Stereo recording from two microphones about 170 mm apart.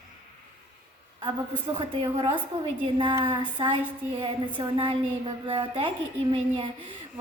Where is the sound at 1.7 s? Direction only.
30° right (ahead or behind).